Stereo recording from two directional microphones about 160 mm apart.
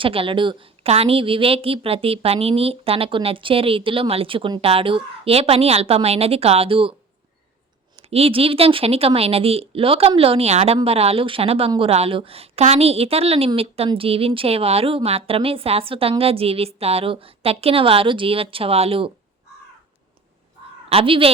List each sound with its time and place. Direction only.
0.0 s a woman's voice: 35° right (ahead or behind)
8.0 s a woman's voice: 40° right (ahead or behind)
20.9 s a woman's voice: 35° right (ahead or behind)